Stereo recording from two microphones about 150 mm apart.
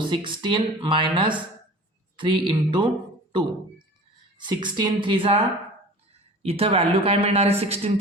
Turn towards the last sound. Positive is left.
turn(degrees=-40)  # may be behind; listen again after turning